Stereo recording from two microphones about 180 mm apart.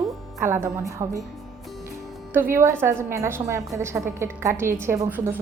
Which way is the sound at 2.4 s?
15° right (ahead or behind).